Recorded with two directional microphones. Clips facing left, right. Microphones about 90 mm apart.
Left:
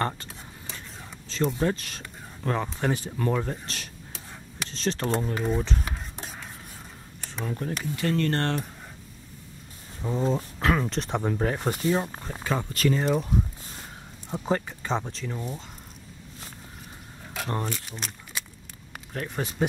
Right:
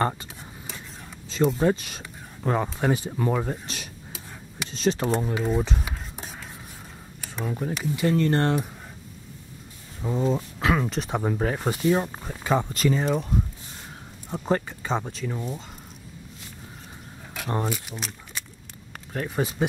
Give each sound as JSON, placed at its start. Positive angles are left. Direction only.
{"t": 0.0, "sound": "a sound", "side_deg": -10}
{"t": 1.7, "sound": "speech", "side_deg": -15}
{"t": 5.6, "sound": "a sound", "side_deg": -10}
{"t": 7.2, "sound": "speech", "side_deg": -5}
{"t": 10.0, "sound": "speech", "side_deg": 0}
{"t": 12.5, "sound": "speech", "side_deg": -20}
{"t": 12.9, "sound": "speech", "side_deg": 0}
{"t": 17.3, "sound": "a sound", "side_deg": 0}
{"t": 17.6, "sound": "speech", "side_deg": -10}